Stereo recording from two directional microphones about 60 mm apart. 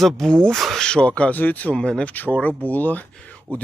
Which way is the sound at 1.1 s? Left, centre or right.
Left.